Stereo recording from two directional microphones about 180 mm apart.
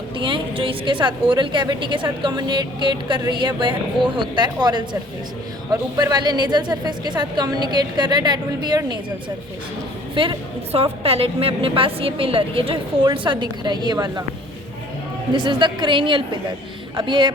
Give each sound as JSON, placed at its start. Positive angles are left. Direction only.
{"t": 0.2, "sound": "a woman's voice", "side_deg": -30}
{"t": 6.0, "sound": "a woman's voice", "side_deg": -25}
{"t": 10.2, "sound": "a woman's voice", "side_deg": -30}
{"t": 15.3, "sound": "a woman's voice", "side_deg": -25}